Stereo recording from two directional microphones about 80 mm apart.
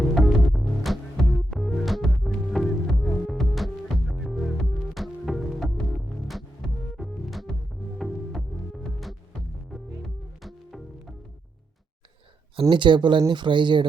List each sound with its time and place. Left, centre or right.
0.3 s music: centre
10.4 s music: centre
12.5 s speech: right